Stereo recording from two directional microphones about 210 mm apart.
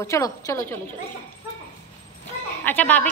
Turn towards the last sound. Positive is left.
turn(degrees=5)  # may be behind; listen again after turning